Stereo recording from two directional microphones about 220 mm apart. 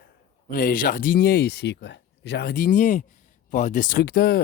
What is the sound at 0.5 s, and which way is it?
Speech, 40° left (ahead or behind).